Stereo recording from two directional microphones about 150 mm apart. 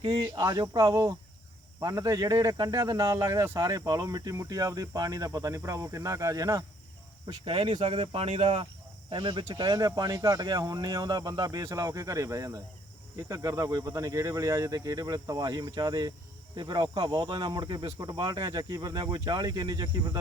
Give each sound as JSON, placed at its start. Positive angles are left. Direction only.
{"t": 0.0, "sound": "speech", "side_deg": -25}
{"t": 9.0, "sound": "speech", "side_deg": -30}